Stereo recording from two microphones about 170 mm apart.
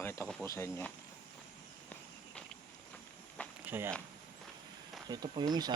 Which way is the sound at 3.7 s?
15° right (ahead or behind).